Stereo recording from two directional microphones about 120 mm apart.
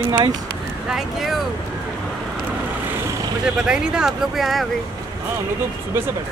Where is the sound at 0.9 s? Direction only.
Centre (ahead or behind).